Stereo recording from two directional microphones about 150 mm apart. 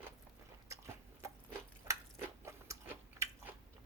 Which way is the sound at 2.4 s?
15° right (ahead or behind).